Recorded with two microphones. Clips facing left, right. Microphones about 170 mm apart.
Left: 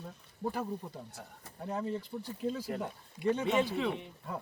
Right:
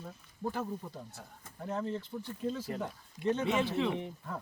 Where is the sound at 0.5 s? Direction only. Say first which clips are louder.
Even; 10° left (ahead or behind).